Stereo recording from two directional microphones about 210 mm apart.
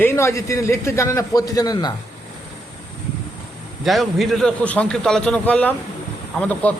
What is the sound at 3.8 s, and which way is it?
A man's voice, centre (ahead or behind).